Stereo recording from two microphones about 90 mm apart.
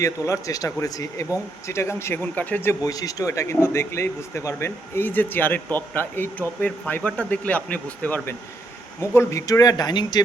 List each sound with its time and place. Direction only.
0.3 s speech: 40° left (ahead or behind); by 2.7 s 20° left (ahead or behind)
2.8 s a man's voice: 40° left (ahead or behind); by 8.4 s 20° left (ahead or behind)
9.0 s speech: 35° left (ahead or behind); by 10.2 s 50° left (ahead or behind)